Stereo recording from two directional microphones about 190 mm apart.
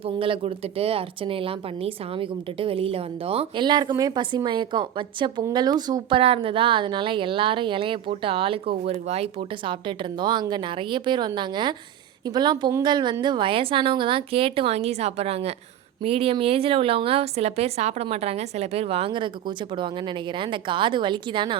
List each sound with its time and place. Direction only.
0.0 s a woman's voice: 30° right (ahead or behind)